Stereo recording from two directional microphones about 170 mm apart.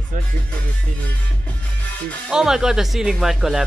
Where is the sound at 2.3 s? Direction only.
5° right (ahead or behind).